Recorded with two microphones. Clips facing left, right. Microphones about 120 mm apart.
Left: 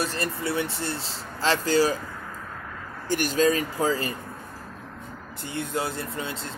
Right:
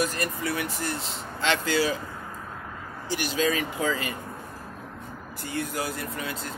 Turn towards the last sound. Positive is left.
turn(degrees=25)  # may be behind; listen again after turning